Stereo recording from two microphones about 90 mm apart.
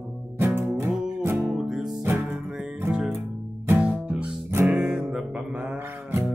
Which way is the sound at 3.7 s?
15° right (ahead or behind).